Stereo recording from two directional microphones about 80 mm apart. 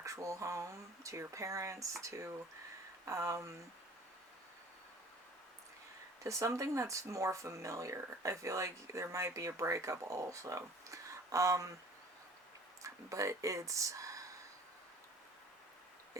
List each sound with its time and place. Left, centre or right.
0.0 s speech: right
6.2 s speech: right
12.8 s speech: right